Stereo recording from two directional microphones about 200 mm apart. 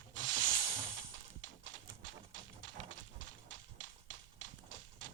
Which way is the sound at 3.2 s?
70° right (ahead or behind).